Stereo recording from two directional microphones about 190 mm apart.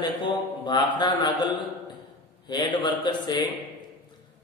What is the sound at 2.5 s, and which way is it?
Speech, 20° left (ahead or behind).